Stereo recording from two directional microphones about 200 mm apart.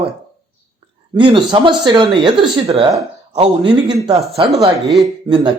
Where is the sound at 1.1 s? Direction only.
25° right (ahead or behind).